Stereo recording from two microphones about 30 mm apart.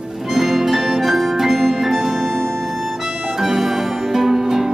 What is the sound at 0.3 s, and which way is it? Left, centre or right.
Music, centre.